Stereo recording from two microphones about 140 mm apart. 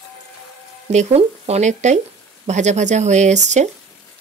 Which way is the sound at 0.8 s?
50° right (ahead or behind).